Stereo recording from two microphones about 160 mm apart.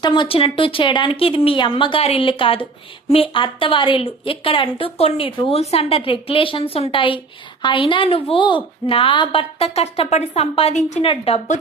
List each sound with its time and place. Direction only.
0.0 s a woman's voice: 30° left (ahead or behind)